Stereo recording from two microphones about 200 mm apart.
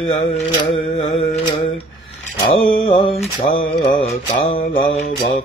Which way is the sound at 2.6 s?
25° left (ahead or behind).